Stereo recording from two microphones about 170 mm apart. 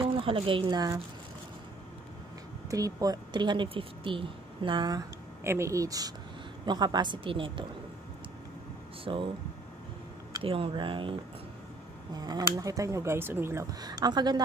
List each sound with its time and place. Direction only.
0.2 s speech: 30° right (ahead or behind)
2.7 s speech: 20° right (ahead or behind)
9.0 s speech: 30° right (ahead or behind)
10.4 s speech: 30° right (ahead or behind)